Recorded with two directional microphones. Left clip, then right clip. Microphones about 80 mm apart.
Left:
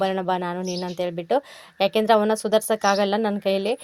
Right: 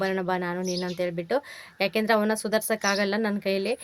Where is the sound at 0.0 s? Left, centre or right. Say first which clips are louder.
Left 4 dB; left.